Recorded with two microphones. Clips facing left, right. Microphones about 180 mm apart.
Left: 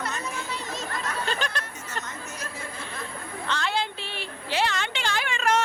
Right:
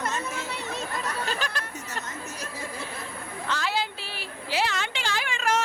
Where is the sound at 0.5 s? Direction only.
60° right (ahead or behind).